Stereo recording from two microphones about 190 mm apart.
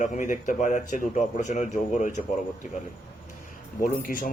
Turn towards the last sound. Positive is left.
turn(degrees=45)  # may be behind; listen again after turning